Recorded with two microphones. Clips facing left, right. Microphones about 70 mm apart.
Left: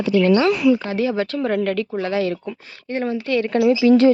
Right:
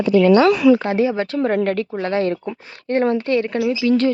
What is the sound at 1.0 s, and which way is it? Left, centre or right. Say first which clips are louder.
A woman's voice: right 2 dB; right.